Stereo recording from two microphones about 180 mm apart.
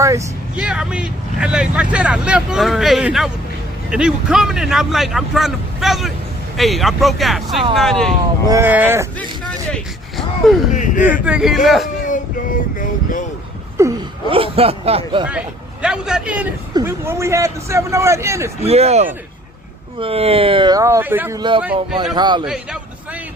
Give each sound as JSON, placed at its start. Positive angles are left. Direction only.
{"t": 0.0, "sound": "speech", "side_deg": -15}
{"t": 0.5, "sound": "speech", "side_deg": -5}
{"t": 8.4, "sound": "speech", "side_deg": -15}
{"t": 9.6, "sound": "a sound", "side_deg": 5}
{"t": 10.8, "sound": "a sound", "side_deg": 45}
{"t": 11.1, "sound": "speech", "side_deg": -5}
{"t": 12.8, "sound": "vehicle", "side_deg": 50}
{"t": 13.8, "sound": "a sound", "side_deg": -15}
{"t": 14.3, "sound": "speech", "side_deg": -30}
{"t": 15.3, "sound": "a man's voice", "side_deg": -5}
{"t": 18.6, "sound": "speech", "side_deg": -35}
{"t": 22.1, "sound": "speech", "side_deg": -25}
{"t": 22.4, "sound": "speech", "side_deg": -5}